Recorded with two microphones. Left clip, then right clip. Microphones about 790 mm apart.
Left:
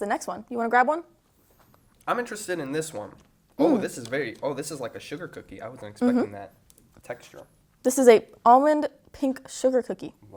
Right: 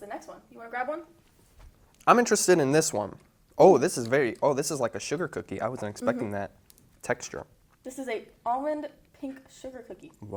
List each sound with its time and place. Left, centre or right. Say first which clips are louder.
0.1 s speech: left 12 dB; left
2.0 s speech: right 8 dB; right
7.0 s speech: right 7 dB; right
7.8 s a woman's voice: left 18 dB; left